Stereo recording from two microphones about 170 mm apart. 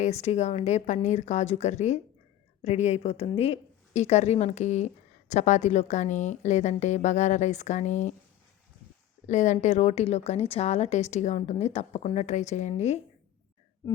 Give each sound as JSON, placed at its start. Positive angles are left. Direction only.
{"t": 0.0, "sound": "a woman's voice", "side_deg": 40}
{"t": 9.2, "sound": "a woman's voice", "side_deg": 45}